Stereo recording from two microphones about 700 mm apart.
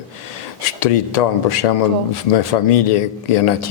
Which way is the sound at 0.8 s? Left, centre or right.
Left.